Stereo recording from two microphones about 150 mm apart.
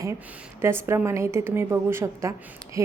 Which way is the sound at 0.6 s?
15° right (ahead or behind).